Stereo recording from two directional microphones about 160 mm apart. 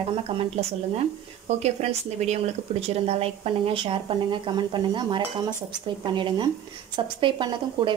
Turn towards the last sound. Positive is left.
turn(degrees=-30)  # may be behind; listen again after turning